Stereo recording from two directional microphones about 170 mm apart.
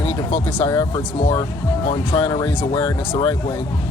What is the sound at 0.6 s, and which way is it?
Speech, 20° left (ahead or behind).